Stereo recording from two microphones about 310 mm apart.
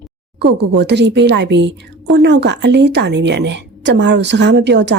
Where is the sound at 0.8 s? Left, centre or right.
Right.